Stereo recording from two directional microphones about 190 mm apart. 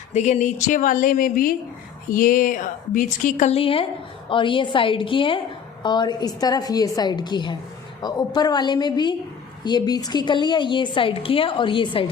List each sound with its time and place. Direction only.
0.1 s a woman's voice: 35° left (ahead or behind)